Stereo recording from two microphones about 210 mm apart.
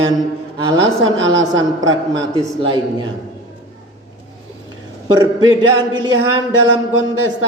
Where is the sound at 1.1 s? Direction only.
20° right (ahead or behind).